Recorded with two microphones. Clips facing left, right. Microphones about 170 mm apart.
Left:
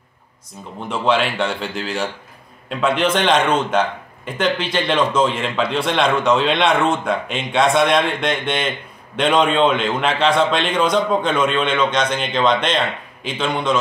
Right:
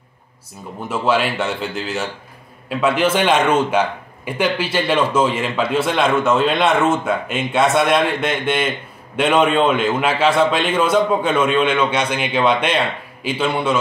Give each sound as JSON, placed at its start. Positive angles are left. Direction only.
{"t": 0.8, "sound": "a man's voice", "side_deg": -5}